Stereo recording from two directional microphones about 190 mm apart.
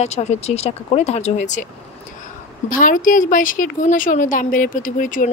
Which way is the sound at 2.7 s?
45° left (ahead or behind).